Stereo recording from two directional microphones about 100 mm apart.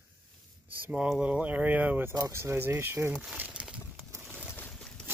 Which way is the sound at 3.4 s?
10° right (ahead or behind).